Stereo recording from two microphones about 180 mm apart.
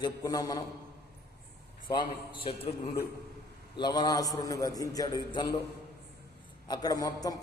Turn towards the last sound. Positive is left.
turn(degrees=20)  # may be behind; listen again after turning